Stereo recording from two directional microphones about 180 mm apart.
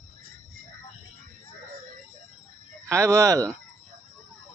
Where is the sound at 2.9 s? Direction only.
15° right (ahead or behind).